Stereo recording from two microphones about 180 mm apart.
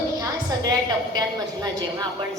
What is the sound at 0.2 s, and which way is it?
A woman's voice, 20° right (ahead or behind).